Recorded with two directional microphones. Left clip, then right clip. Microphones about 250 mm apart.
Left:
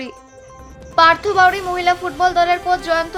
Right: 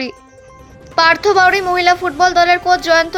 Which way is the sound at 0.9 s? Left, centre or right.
Right.